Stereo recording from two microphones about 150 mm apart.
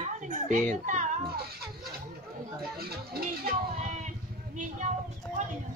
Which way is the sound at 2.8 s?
90° right.